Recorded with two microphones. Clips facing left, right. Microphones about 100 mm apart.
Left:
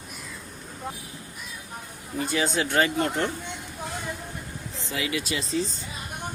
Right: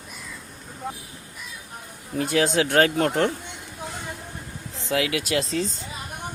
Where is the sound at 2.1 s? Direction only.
85° right.